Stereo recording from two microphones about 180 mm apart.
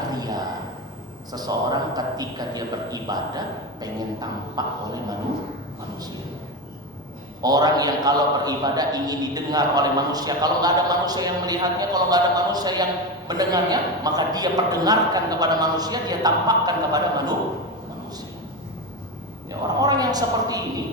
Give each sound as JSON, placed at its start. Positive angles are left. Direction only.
{"t": 0.1, "sound": "a sound", "side_deg": -20}
{"t": 1.3, "sound": "a man's voice", "side_deg": -20}
{"t": 7.4, "sound": "a man's voice", "side_deg": -20}
{"t": 19.5, "sound": "a man's voice", "side_deg": -20}